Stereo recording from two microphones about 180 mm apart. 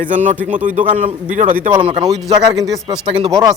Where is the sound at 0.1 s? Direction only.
45° right (ahead or behind).